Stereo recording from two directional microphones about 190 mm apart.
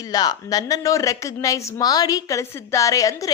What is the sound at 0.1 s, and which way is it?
A woman's voice, 20° left (ahead or behind).